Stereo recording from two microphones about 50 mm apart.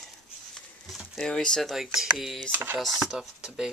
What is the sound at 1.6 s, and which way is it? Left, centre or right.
Speech, centre.